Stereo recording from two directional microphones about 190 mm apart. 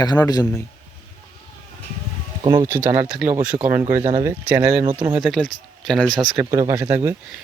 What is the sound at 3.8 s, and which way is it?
Speech, 20° right (ahead or behind).